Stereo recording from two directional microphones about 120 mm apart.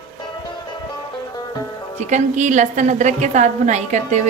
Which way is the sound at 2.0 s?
85° right.